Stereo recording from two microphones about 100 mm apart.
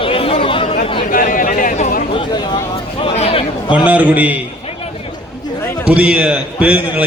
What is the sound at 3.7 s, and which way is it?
Speech, 15° right (ahead or behind).